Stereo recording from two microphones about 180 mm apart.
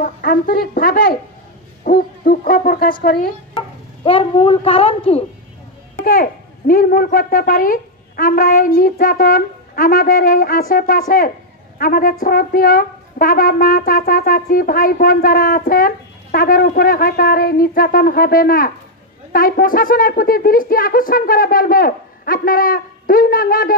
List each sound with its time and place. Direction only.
0.0 s speech: 55° left (ahead or behind)
1.9 s hoot: 55° left (ahead or behind)
3.5 s speech: 30° left (ahead or behind)
5.9 s a child's voice: 50° left (ahead or behind)